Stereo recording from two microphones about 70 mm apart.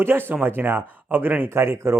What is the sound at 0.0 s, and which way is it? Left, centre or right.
Speech, right.